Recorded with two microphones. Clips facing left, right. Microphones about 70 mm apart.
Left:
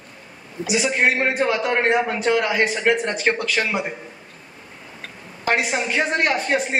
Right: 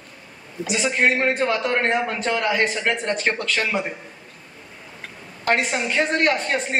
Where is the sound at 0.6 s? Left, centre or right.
Centre.